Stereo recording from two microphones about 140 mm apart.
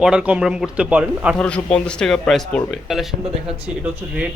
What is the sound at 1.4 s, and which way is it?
A man's voice, 10° left (ahead or behind).